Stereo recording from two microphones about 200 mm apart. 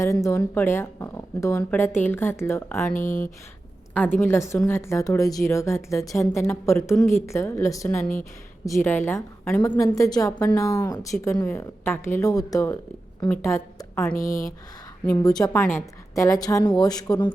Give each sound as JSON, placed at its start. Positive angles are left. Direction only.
{"t": 0.0, "sound": "a woman's voice", "side_deg": 15}
{"t": 2.9, "sound": "speech", "side_deg": 40}
{"t": 3.9, "sound": "a woman's voice", "side_deg": 10}
{"t": 14.2, "sound": "speech", "side_deg": 45}
{"t": 15.0, "sound": "a woman's voice", "side_deg": 15}